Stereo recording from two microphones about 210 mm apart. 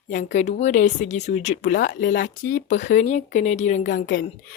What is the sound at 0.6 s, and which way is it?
Speech, 35° left (ahead or behind).